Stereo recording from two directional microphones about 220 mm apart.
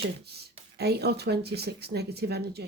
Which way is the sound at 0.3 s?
50° right (ahead or behind).